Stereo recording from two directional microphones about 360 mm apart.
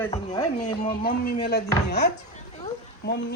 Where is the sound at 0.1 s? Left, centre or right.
Centre.